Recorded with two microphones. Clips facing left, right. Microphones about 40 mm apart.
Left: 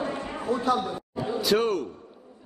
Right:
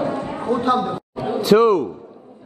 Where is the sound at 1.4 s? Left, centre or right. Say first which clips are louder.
Right 10 dB; right.